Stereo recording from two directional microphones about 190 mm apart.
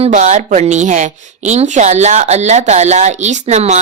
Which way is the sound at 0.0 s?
40° right (ahead or behind).